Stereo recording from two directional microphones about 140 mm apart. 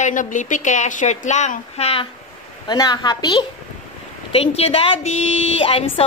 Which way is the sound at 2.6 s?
30° left (ahead or behind).